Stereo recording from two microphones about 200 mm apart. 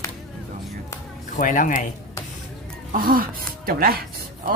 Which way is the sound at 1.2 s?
40° left (ahead or behind).